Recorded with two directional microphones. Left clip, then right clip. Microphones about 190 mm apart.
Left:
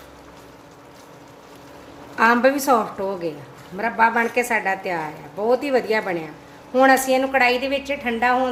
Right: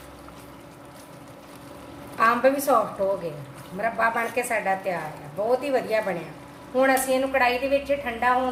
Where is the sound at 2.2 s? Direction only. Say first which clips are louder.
Left 3 dB; 55° left (ahead or behind).